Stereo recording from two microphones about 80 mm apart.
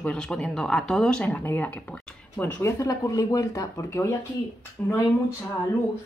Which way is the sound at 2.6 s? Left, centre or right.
Left.